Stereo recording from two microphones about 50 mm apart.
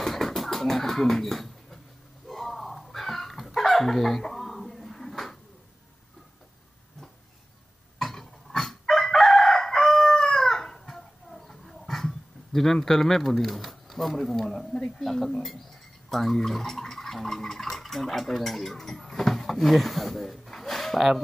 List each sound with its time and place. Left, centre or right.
0.0 s bird: centre
2.2 s a sound: centre
8.0 s chicken: centre
16.1 s speech: centre